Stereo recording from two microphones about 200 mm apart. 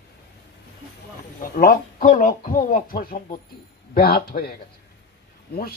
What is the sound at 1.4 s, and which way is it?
A man's voice, 45° left (ahead or behind).